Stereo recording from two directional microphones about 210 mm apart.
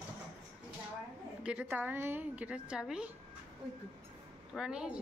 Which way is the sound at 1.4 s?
5° right (ahead or behind).